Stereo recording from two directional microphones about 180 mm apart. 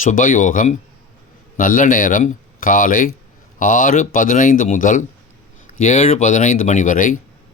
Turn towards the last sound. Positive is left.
turn(degrees=45)  # may be behind; listen again after turning